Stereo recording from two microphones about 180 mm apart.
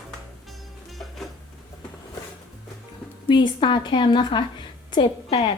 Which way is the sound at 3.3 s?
25° left (ahead or behind).